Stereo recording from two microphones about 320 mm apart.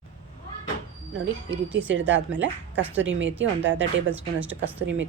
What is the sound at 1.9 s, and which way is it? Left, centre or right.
Speech, right.